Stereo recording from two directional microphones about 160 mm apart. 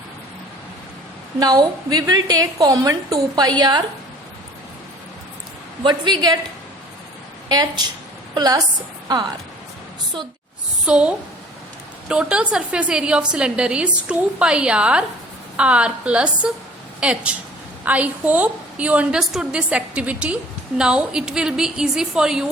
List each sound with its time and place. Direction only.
1.4 s a woman's voice: 25° right (ahead or behind)
5.8 s a woman's voice: 25° right (ahead or behind)
7.4 s a woman's voice: 25° right (ahead or behind)
10.8 s a woman's voice: 5° right (ahead or behind)